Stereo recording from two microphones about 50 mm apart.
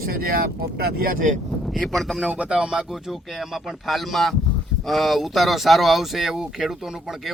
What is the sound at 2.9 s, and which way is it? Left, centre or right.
Speech, centre.